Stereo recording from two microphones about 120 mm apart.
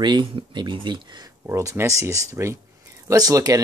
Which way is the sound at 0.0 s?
40° right (ahead or behind).